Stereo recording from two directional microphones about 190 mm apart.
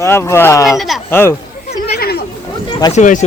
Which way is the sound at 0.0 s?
15° left (ahead or behind).